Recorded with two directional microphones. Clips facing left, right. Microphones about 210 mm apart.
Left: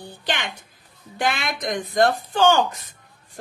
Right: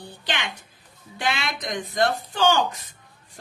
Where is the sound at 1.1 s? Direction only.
50° left (ahead or behind).